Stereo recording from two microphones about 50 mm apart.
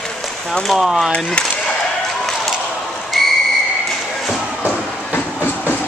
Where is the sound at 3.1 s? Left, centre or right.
Centre.